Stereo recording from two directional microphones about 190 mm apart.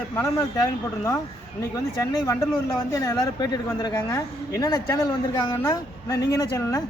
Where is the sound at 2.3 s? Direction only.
15° left (ahead or behind).